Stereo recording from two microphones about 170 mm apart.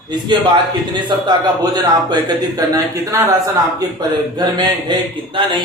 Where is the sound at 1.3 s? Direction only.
25° right (ahead or behind).